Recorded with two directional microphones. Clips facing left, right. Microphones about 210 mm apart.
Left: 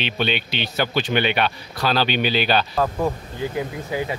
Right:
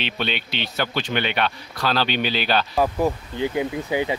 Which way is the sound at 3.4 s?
20° right (ahead or behind).